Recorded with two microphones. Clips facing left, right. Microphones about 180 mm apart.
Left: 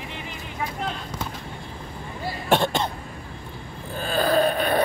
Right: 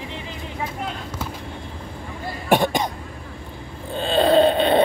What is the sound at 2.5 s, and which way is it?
Cough, 15° right (ahead or behind).